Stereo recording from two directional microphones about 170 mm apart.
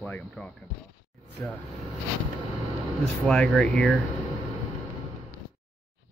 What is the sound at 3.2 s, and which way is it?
Speech, 5° left (ahead or behind).